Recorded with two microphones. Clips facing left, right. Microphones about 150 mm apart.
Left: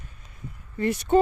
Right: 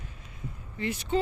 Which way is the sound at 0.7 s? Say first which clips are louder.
Left 8 dB; 50° left (ahead or behind).